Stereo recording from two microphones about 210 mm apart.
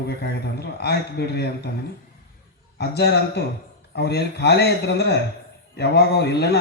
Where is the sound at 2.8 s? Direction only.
50° left (ahead or behind).